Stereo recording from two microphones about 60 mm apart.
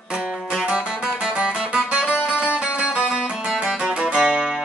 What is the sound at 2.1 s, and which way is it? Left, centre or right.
Music, left.